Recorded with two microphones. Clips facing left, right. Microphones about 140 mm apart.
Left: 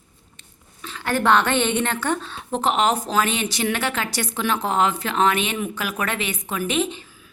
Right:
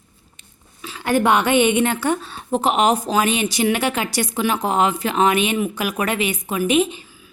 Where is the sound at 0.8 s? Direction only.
10° right (ahead or behind).